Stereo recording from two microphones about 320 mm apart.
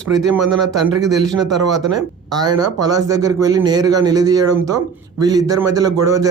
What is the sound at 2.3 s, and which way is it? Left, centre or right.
Speech, centre.